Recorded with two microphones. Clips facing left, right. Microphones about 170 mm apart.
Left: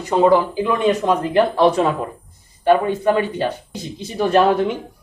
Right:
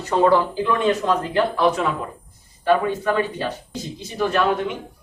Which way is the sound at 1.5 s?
30° left (ahead or behind).